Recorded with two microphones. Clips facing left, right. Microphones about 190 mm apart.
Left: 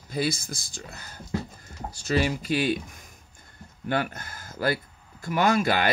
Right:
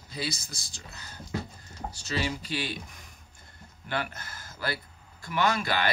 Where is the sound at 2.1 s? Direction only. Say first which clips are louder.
Left 7 dB; 50° left (ahead or behind).